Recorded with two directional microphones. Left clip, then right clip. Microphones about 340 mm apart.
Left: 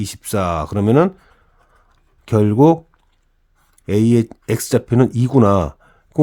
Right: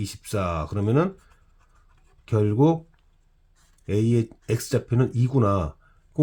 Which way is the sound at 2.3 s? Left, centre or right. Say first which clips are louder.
Left 9 dB; left.